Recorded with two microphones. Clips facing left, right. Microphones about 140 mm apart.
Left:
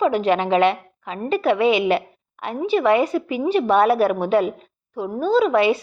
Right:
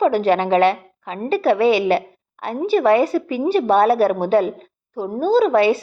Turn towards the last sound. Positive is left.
turn(degrees=-35)  # may be behind; listen again after turning